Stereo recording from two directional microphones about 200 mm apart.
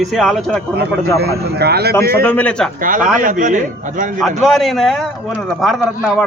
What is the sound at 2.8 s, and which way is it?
A man's voice, 45° right (ahead or behind).